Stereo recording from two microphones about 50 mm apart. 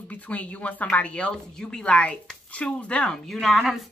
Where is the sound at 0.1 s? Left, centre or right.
Left.